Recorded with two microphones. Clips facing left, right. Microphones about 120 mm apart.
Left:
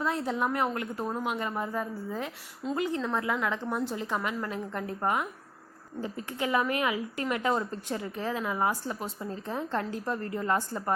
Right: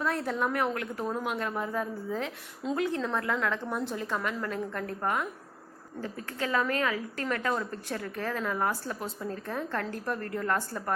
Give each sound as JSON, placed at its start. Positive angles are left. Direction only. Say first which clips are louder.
{"t": 0.0, "sound": "a woman's voice", "louder": "even", "side_deg": 15}